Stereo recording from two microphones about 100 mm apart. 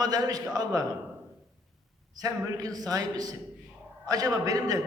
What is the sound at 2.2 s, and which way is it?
A man's voice, 40° right (ahead or behind).